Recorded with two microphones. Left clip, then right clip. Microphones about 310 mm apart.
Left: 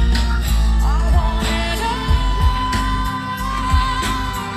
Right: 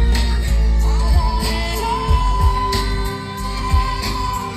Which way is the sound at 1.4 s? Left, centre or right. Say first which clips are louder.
Left 2 dB; centre.